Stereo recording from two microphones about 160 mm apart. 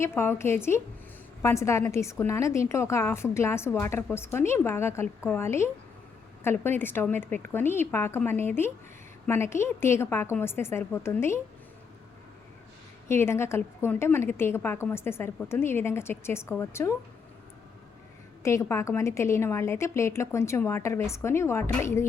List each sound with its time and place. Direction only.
0.2 s a woman's voice: 15° left (ahead or behind)
13.1 s a woman's voice: 15° left (ahead or behind)
18.4 s a woman's voice: 15° left (ahead or behind)